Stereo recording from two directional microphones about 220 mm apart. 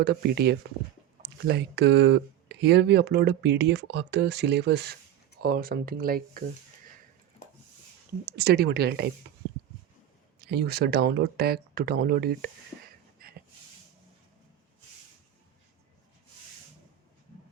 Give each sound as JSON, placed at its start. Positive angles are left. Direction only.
{"t": 0.0, "sound": "speech", "side_deg": -45}
{"t": 8.2, "sound": "speech", "side_deg": -45}
{"t": 10.4, "sound": "speech", "side_deg": -45}